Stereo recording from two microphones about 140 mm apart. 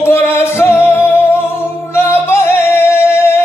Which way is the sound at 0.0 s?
15° left (ahead or behind).